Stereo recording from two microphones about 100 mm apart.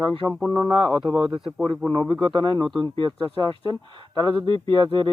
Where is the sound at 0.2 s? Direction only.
15° right (ahead or behind).